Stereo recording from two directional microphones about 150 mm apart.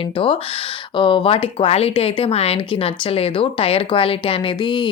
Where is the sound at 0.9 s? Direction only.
35° left (ahead or behind).